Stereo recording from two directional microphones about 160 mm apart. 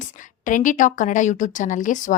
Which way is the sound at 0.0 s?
55° left (ahead or behind).